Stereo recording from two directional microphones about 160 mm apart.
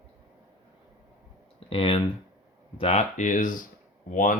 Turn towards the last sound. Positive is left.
turn(degrees=55)  # may be behind; listen again after turning